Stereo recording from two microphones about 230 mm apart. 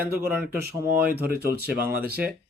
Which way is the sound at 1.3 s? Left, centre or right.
Right.